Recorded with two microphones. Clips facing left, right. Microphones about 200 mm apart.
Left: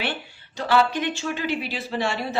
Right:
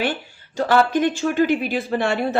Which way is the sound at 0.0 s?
45° right (ahead or behind).